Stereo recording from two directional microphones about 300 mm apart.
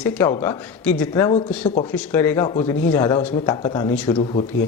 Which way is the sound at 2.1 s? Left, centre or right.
Centre.